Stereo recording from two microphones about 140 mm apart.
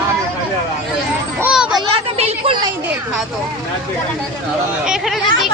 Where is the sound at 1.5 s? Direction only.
5° right (ahead or behind).